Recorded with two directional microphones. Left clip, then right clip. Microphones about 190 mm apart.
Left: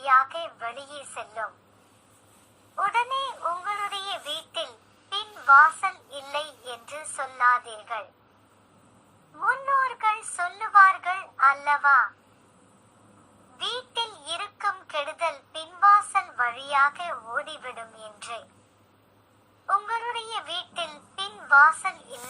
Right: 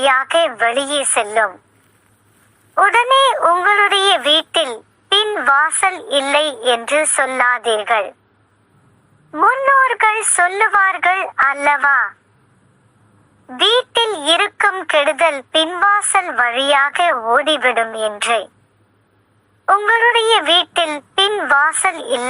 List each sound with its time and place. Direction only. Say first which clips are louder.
0.0 s a woman's voice: right 9 dB; 45° right (ahead or behind)
2.7 s a woman's voice: right 14 dB; 45° right (ahead or behind)
9.4 s a woman's voice: right 12 dB; 45° right (ahead or behind)
13.6 s a woman's voice: right 17 dB; 45° right (ahead or behind)
19.6 s a woman's voice: right 14 dB; 45° right (ahead or behind)